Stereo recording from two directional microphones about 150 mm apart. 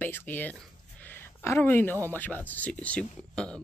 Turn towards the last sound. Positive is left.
turn(degrees=5)  # may be behind; listen again after turning